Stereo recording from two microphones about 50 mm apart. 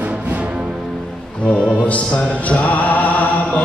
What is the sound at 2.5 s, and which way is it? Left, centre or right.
Music, left.